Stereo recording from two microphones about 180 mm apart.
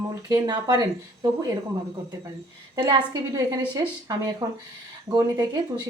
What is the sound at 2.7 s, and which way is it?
A woman's voice, 25° right (ahead or behind).